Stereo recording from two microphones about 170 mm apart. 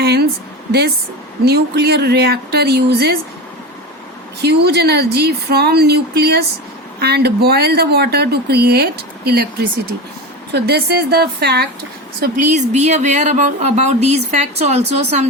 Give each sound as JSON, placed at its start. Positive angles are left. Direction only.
{"t": 0.0, "sound": "a woman's voice", "side_deg": -70}
{"t": 1.5, "sound": "speech", "side_deg": -70}
{"t": 4.4, "sound": "speech", "side_deg": -75}
{"t": 12.5, "sound": "a woman's voice", "side_deg": -45}